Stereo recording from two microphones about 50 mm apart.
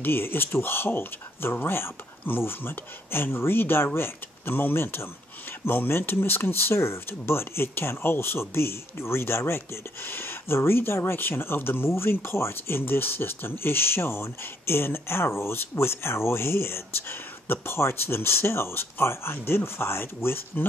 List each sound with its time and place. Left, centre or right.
0.0 s speech: left